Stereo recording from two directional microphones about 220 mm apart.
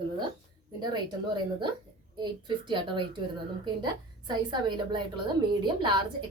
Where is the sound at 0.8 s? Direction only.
20° right (ahead or behind).